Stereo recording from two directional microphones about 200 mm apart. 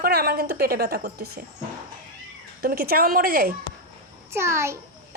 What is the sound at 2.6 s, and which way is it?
Speech, 50° right (ahead or behind).